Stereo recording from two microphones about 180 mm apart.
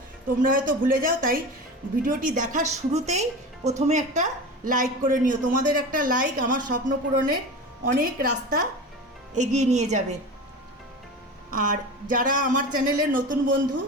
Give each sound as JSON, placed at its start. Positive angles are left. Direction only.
{"t": 0.4, "sound": "speech", "side_deg": -50}
{"t": 11.5, "sound": "speech", "side_deg": -50}